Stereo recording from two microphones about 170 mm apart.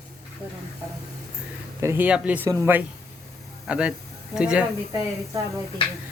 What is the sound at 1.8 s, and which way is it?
Speech, 15° right (ahead or behind).